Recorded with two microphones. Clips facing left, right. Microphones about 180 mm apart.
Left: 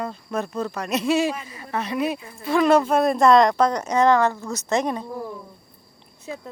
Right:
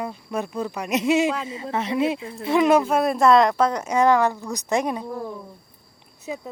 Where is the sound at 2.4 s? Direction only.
20° right (ahead or behind).